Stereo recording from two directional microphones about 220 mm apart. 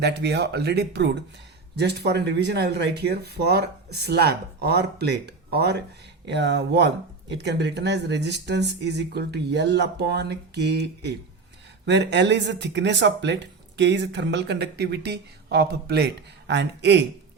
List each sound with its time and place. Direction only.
0.0 s speech: 50° right (ahead or behind)